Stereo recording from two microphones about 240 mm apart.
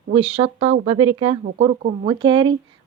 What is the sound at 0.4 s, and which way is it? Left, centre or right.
Speech, right.